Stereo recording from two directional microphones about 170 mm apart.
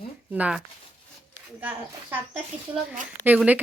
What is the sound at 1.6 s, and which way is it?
Speech, 10° right (ahead or behind).